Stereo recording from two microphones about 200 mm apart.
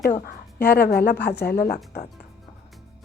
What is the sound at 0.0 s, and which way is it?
A woman's voice, 50° left (ahead or behind).